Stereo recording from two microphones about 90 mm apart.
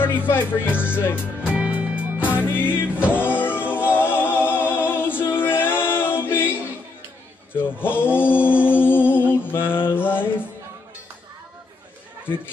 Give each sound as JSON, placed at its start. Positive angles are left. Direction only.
{"t": 0.2, "sound": "speech", "side_deg": 20}
{"t": 1.5, "sound": "music", "side_deg": -15}
{"t": 2.2, "sound": "music", "side_deg": 20}
{"t": 7.5, "sound": "a sound", "side_deg": 25}